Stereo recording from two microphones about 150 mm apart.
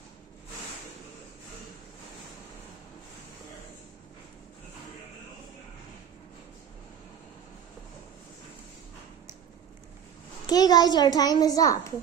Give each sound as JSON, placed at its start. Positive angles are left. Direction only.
{"t": 10.4, "sound": "a child's voice", "side_deg": 25}